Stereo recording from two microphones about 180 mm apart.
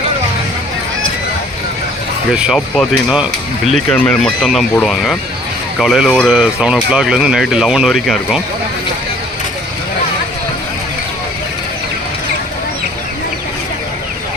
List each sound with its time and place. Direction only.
2.3 s speech: 5° right (ahead or behind)